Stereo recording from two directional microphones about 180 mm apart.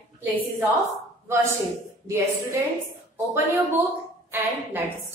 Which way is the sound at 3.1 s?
15° right (ahead or behind).